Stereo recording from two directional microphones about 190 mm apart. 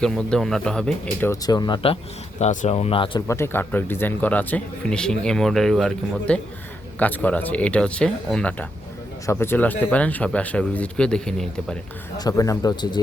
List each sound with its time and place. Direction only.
0.0 s speech: 5° left (ahead or behind)
1.3 s speech: 20° left (ahead or behind)
2.4 s speech: 40° left (ahead or behind)
3.2 s speech: 15° left (ahead or behind)
12.1 s speech: 20° left (ahead or behind)